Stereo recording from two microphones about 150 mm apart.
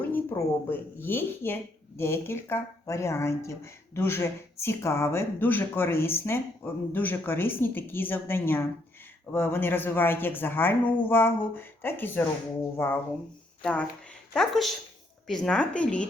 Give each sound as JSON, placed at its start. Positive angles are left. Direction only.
{"t": 0.1, "sound": "speech", "side_deg": 15}